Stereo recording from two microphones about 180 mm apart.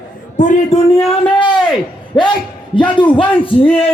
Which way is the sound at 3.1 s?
30° left (ahead or behind).